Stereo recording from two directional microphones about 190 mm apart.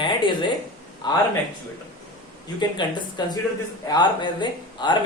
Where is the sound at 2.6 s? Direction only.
25° left (ahead or behind).